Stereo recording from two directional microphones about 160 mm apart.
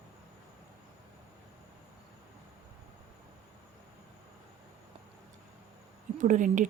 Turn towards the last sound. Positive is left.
turn(degrees=-55)  # may be behind; listen again after turning